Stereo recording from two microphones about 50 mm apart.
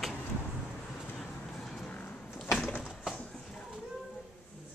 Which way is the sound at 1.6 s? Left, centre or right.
Centre.